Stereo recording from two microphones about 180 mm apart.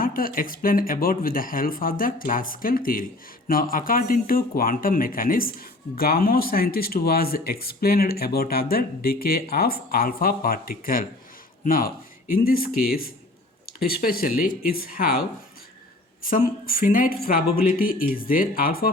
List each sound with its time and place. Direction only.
0.0 s speech: 50° left (ahead or behind)
16.2 s speech: 50° left (ahead or behind)